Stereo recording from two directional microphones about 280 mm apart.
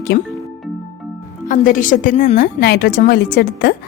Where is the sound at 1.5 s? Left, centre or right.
Left.